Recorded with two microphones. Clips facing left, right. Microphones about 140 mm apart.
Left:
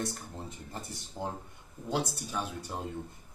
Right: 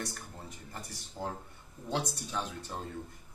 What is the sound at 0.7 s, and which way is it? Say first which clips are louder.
Speech: left 3 dB; 25° left (ahead or behind).